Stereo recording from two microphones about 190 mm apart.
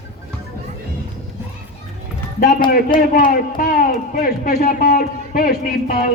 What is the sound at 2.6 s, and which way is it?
Speech, 45° left (ahead or behind).